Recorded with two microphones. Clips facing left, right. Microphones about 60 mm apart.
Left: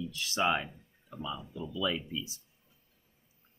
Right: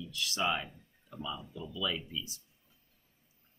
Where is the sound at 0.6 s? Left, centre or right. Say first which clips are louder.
Left 2 dB; centre.